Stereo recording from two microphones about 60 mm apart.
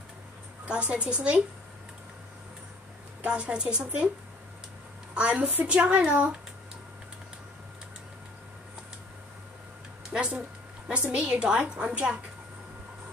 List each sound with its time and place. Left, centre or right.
0.7 s a woman's voice: centre
3.2 s a woman's voice: centre
5.1 s a woman's voice: right
10.1 s a woman's voice: centre